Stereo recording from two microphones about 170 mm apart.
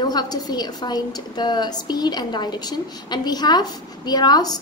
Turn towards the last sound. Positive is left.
turn(degrees=25)  # may be behind; listen again after turning